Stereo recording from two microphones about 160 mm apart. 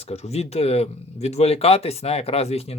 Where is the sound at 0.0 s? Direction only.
40° left (ahead or behind).